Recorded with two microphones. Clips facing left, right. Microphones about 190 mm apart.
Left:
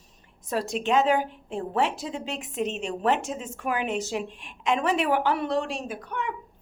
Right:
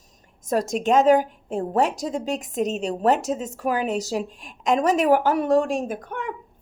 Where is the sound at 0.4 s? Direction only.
45° right (ahead or behind).